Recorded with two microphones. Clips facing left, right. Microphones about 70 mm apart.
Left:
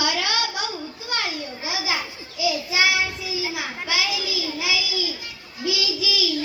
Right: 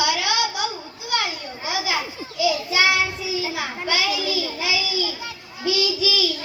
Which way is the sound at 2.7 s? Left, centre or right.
Centre.